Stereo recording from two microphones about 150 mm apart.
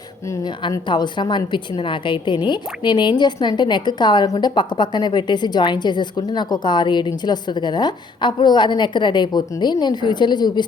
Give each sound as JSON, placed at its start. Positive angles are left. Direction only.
{"t": 0.3, "sound": "a woman's voice", "side_deg": 25}